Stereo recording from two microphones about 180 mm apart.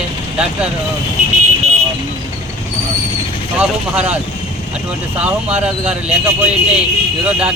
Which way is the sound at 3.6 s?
5° right (ahead or behind).